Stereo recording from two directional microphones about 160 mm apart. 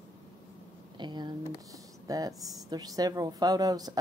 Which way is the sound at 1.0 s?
25° right (ahead or behind).